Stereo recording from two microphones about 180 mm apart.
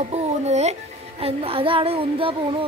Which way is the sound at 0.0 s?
40° right (ahead or behind).